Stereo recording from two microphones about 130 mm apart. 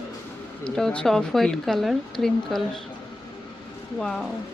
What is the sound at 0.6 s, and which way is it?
Speech, 5° left (ahead or behind).